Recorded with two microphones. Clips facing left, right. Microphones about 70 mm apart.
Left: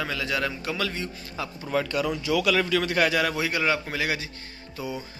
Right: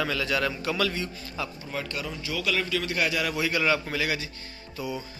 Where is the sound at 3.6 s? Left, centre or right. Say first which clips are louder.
Even; left.